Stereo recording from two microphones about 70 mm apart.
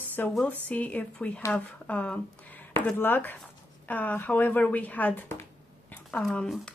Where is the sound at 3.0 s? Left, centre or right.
Left.